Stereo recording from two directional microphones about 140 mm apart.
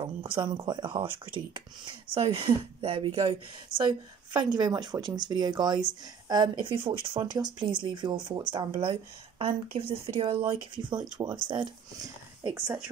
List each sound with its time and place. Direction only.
0.0 s speech: 35° right (ahead or behind)